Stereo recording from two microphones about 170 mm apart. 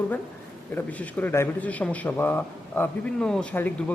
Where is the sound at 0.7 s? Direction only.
10° left (ahead or behind).